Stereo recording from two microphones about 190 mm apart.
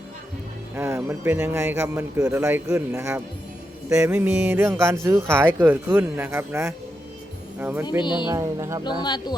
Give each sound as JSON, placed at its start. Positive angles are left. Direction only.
{"t": 0.8, "sound": "a man's voice", "side_deg": -15}
{"t": 7.9, "sound": "speech", "side_deg": 25}
{"t": 8.3, "sound": "a man's voice", "side_deg": -15}
{"t": 8.8, "sound": "speech", "side_deg": 25}